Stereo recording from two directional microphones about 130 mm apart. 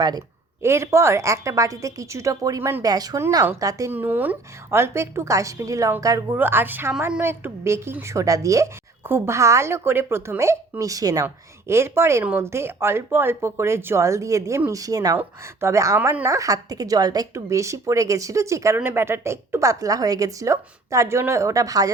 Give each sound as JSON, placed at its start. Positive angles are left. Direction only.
{"t": 0.6, "sound": "a woman's voice", "side_deg": -20}
{"t": 2.8, "sound": "a woman's voice", "side_deg": -30}
{"t": 3.9, "sound": "a woman's voice", "side_deg": -15}
{"t": 6.3, "sound": "a woman's voice", "side_deg": -15}